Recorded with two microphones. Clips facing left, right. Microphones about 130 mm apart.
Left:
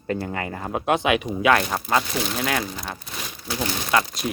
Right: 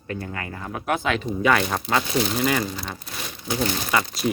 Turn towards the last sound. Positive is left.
turn(degrees=0)  # may be behind; listen again after turning